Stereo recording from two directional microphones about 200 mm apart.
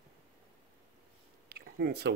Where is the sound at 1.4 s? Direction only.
55° right (ahead or behind).